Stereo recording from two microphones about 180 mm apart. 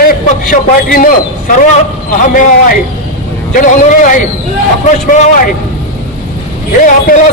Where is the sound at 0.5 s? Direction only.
50° left (ahead or behind).